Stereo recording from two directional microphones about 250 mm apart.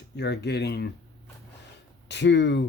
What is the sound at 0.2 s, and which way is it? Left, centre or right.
Speech, left.